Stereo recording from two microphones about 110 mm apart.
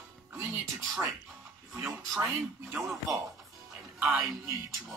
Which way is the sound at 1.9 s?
5° right (ahead or behind).